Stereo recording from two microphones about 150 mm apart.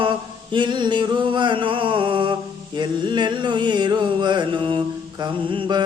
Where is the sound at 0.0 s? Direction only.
30° right (ahead or behind).